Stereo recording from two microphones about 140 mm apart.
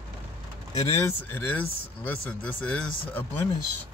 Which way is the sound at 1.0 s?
15° left (ahead or behind).